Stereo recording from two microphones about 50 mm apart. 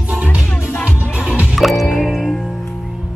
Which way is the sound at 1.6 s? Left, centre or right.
Centre.